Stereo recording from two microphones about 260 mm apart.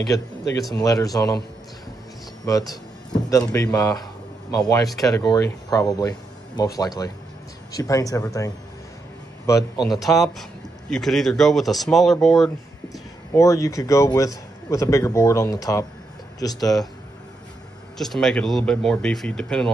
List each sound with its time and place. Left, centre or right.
0.1 s a man's voice: centre
2.7 s a man's voice: centre
9.8 s speech: centre
13.3 s a man's voice: centre
17.9 s speech: centre